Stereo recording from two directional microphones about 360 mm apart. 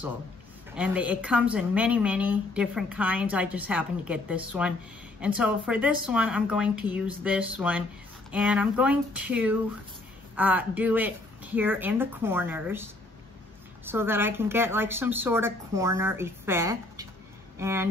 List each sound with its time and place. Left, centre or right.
0.7 s a woman's voice: centre
13.8 s a woman's voice: centre